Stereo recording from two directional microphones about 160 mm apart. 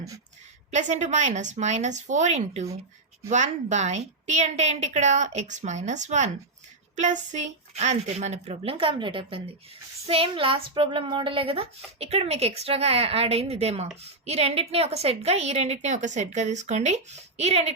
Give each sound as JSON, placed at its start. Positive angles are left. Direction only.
{"t": 0.7, "sound": "a woman's voice", "side_deg": -50}